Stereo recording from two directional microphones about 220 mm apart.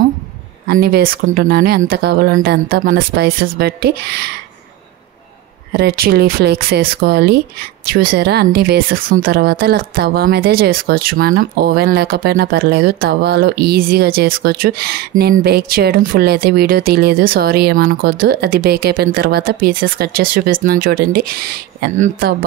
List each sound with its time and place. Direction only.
0.7 s speech: 45° right (ahead or behind)
5.7 s speech: 50° right (ahead or behind)